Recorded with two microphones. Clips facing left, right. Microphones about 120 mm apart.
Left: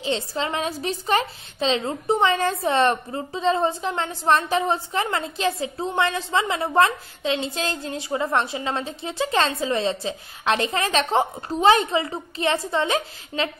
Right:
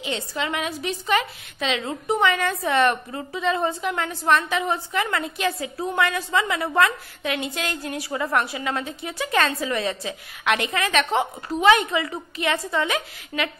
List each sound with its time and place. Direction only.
0.0 s a woman's voice: 30° left (ahead or behind)